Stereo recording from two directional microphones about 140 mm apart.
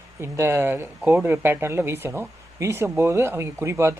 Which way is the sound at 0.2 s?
20° right (ahead or behind).